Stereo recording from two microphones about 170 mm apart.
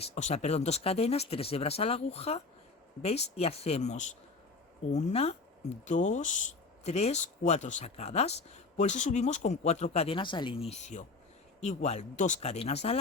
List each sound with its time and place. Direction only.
0.0 s speech: 40° left (ahead or behind)